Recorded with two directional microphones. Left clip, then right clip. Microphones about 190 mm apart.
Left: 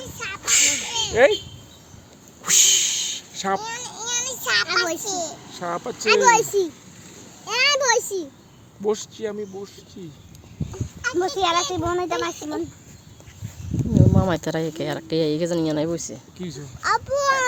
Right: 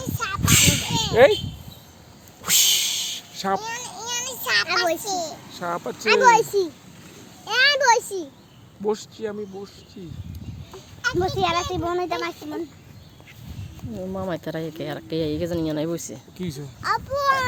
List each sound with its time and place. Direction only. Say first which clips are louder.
0.2 s a sound: right 1 dB; 30° right (ahead or behind)
2.4 s a sound: left 1 dB; 15° right (ahead or behind); by 4.9 s centre (ahead or behind)
5.0 s a child's voice: right 1 dB; 5° left (ahead or behind); by 9.4 s 20° left (ahead or behind)
11.2 s a child's voice: left 3 dB; 45° left (ahead or behind)
14.1 s speech: left 6 dB; 40° left (ahead or behind); by 15.9 s 15° left (ahead or behind)
15.9 s speech: left 2 dB; centre (ahead or behind)
16.4 s speech: right 2 dB; 35° right (ahead or behind)
16.8 s a child's voice: left 2 dB; 50° left (ahead or behind)